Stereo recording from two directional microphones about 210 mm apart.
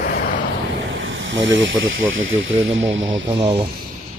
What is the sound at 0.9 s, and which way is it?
Speech, 65° right (ahead or behind).